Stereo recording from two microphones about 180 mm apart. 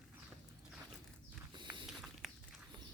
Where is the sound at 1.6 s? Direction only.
25° right (ahead or behind).